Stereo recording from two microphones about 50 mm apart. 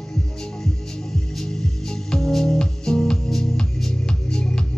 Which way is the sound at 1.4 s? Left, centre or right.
Centre.